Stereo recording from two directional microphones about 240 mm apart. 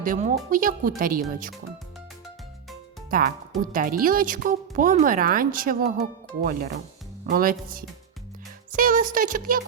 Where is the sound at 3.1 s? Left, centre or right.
Right.